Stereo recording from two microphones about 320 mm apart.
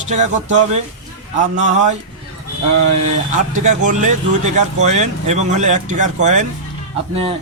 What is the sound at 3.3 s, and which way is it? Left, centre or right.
Speech, right.